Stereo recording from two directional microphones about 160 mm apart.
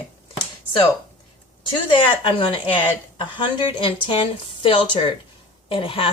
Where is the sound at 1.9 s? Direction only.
30° left (ahead or behind).